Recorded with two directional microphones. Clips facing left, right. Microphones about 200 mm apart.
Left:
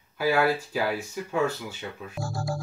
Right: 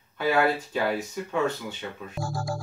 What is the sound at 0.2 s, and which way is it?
Speech, 5° left (ahead or behind).